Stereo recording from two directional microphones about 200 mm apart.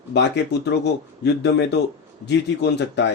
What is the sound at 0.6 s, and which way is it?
A man's voice, 55° left (ahead or behind).